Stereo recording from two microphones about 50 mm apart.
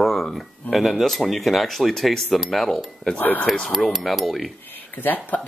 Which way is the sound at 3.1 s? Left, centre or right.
Left.